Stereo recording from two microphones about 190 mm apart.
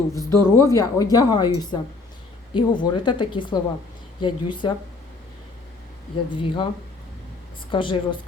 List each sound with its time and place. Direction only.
0.1 s a woman's voice: 15° left (ahead or behind)
6.3 s a woman's voice: 25° left (ahead or behind)
7.7 s a woman's voice: 25° left (ahead or behind)